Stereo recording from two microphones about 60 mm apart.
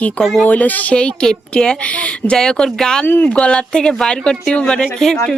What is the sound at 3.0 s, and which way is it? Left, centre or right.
Speech, left.